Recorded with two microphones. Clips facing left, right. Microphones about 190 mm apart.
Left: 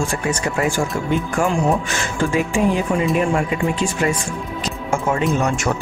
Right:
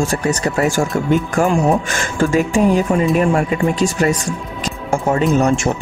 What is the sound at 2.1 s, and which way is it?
Speech, 45° right (ahead or behind).